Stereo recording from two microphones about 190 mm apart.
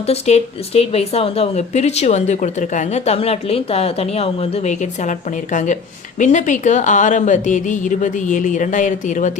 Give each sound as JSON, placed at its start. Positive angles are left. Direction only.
{"t": 0.1, "sound": "speech", "side_deg": 35}